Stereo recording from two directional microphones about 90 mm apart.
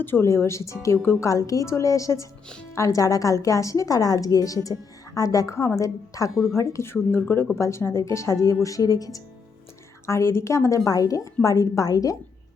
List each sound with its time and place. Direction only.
0.0 s a woman's voice: 25° left (ahead or behind)
6.3 s speech: 5° right (ahead or behind)
6.6 s a woman's voice: 30° left (ahead or behind)
10.1 s a woman's voice: 30° left (ahead or behind)